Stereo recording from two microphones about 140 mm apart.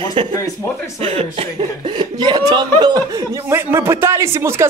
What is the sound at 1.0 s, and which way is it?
Speech, 45° right (ahead or behind).